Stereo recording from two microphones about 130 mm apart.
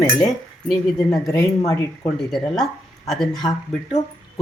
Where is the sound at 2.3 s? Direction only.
5° left (ahead or behind).